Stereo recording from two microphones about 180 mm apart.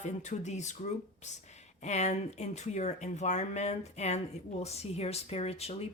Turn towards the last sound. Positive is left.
turn(degrees=35)  # may be behind; listen again after turning